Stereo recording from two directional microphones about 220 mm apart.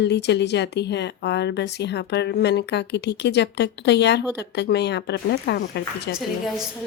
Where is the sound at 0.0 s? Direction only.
50° left (ahead or behind).